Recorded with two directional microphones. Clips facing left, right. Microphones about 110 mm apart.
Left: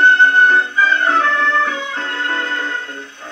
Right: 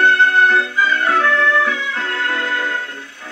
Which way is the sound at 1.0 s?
30° left (ahead or behind).